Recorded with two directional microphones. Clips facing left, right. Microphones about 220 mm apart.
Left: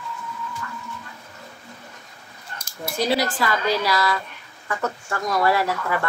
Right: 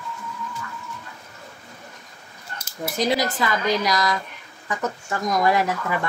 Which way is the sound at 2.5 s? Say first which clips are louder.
Right 3 dB; 5° right (ahead or behind).